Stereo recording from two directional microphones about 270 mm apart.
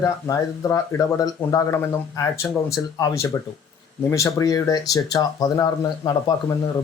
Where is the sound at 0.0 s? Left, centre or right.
Centre.